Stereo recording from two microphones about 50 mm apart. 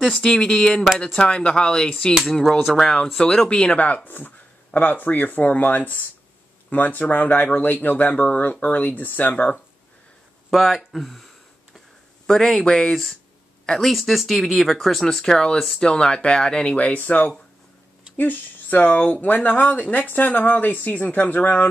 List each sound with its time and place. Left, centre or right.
0.2 s speech: centre; by 8.2 s left
8.2 s speech: left
10.5 s speech: centre
12.3 s speech: centre
16.7 s speech: left